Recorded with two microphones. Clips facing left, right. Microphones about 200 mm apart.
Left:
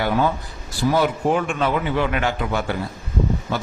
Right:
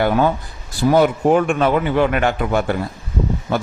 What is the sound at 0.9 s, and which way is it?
A man's voice, 50° right (ahead or behind).